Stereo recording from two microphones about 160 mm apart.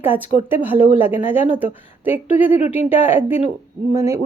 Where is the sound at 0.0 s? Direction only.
10° right (ahead or behind).